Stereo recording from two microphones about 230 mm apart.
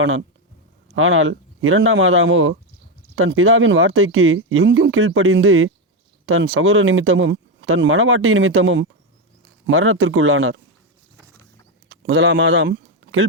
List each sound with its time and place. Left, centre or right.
0.0 s speech: right
11.9 s speech: right